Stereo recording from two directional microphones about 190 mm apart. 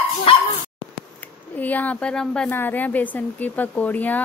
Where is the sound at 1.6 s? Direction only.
10° left (ahead or behind).